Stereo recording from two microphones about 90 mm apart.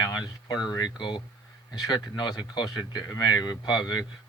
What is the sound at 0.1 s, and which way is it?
Speech, 50° left (ahead or behind).